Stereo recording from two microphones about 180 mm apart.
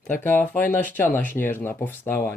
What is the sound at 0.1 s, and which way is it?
Speech, 10° left (ahead or behind).